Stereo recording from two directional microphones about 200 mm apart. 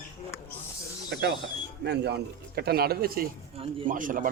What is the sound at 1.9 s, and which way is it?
A man's voice, 55° right (ahead or behind).